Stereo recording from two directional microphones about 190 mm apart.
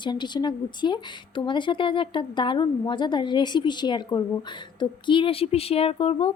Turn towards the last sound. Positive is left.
turn(degrees=30)  # may be behind; listen again after turning